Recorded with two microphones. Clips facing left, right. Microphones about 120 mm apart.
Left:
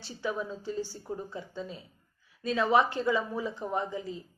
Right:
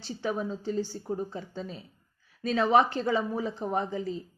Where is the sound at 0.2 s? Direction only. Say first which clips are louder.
Right 2 dB; 45° right (ahead or behind).